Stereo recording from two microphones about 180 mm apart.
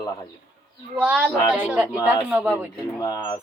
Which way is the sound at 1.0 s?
10° right (ahead or behind).